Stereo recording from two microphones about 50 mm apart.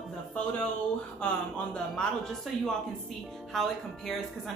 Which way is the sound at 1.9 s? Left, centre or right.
Centre.